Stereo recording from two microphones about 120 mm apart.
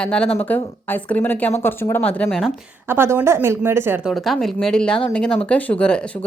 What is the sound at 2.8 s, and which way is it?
A woman's voice, 20° right (ahead or behind).